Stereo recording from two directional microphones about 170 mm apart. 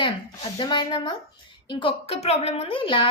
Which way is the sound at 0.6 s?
25° left (ahead or behind).